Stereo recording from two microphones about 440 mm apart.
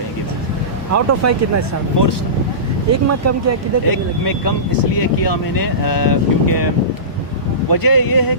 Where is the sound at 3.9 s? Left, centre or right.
Left.